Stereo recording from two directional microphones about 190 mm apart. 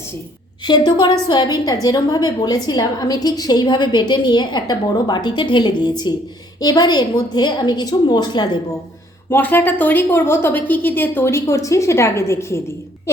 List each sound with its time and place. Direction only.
0.6 s a woman's voice: 25° left (ahead or behind)
9.3 s a woman's voice: 10° left (ahead or behind)